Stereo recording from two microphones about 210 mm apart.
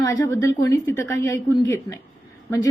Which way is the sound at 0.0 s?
15° left (ahead or behind).